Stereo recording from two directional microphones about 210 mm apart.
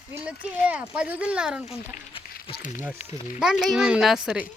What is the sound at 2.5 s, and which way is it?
Speech, 25° left (ahead or behind).